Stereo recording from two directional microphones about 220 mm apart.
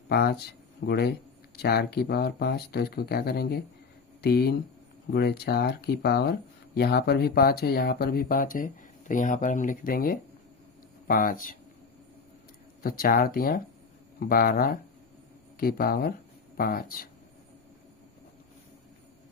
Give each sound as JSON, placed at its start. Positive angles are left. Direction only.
{"t": 0.1, "sound": "speech", "side_deg": 45}
{"t": 12.8, "sound": "speech", "side_deg": 40}